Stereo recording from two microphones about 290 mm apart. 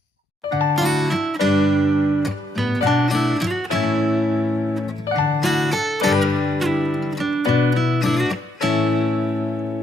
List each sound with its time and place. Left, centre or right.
0.5 s music: centre